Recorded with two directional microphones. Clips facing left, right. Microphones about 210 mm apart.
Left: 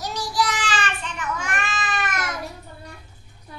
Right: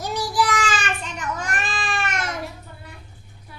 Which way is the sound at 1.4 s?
35° right (ahead or behind).